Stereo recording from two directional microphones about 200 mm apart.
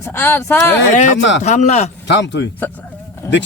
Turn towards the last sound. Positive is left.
turn(degrees=10)  # may be behind; listen again after turning